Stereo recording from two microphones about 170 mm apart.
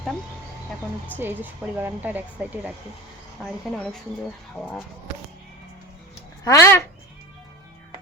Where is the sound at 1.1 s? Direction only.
10° right (ahead or behind).